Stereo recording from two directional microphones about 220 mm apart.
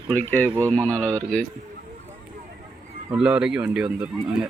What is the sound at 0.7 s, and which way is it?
Speech, 5° left (ahead or behind).